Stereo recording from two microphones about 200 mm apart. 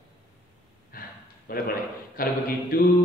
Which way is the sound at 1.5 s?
45° left (ahead or behind).